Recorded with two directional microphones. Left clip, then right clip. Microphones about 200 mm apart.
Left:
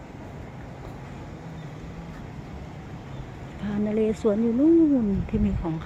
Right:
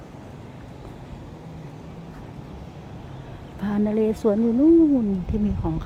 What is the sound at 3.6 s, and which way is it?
A woman's voice, 15° right (ahead or behind).